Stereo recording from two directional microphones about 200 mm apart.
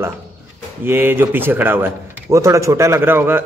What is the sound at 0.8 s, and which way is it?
A man's voice, 10° right (ahead or behind).